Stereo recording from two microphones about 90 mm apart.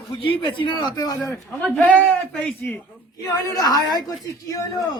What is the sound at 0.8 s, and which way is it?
Speech, 50° left (ahead or behind).